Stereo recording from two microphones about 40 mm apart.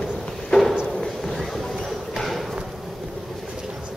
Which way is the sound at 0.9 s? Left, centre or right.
Centre.